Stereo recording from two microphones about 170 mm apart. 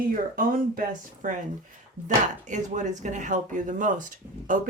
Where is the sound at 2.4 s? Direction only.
45° right (ahead or behind).